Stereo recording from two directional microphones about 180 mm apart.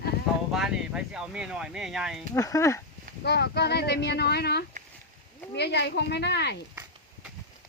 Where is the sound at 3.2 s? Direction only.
65° left (ahead or behind).